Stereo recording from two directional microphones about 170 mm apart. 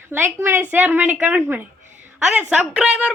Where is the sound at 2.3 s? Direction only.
5° right (ahead or behind).